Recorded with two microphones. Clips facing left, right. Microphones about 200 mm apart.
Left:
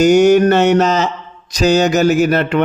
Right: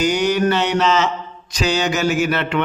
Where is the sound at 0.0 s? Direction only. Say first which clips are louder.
Left 8 dB; 45° left (ahead or behind).